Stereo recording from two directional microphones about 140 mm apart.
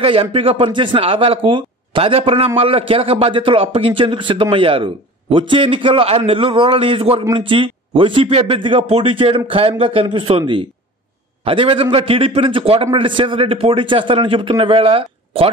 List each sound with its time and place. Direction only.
0.0 s speech: 40° right (ahead or behind)